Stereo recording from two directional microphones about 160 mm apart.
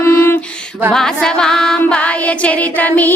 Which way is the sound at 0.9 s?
5° left (ahead or behind).